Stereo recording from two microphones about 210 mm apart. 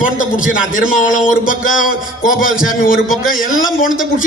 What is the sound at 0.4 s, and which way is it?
A man's voice, 40° left (ahead or behind).